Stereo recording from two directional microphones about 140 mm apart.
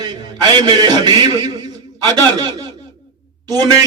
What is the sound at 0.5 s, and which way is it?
A man's voice, 30° right (ahead or behind).